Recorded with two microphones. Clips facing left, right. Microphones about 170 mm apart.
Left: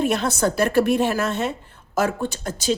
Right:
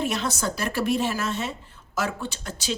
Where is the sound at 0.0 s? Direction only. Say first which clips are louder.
Left 6 dB; 55° left (ahead or behind).